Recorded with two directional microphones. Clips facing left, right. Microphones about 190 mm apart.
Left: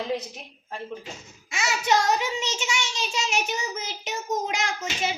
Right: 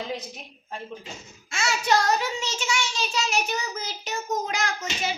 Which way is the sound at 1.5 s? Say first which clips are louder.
Even; 20° left (ahead or behind).